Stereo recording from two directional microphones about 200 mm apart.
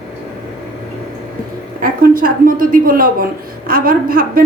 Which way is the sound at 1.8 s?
45° right (ahead or behind).